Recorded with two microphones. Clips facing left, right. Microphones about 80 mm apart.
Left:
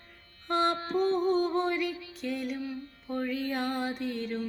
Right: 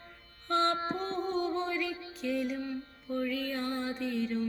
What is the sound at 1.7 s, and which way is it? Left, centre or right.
Music, centre.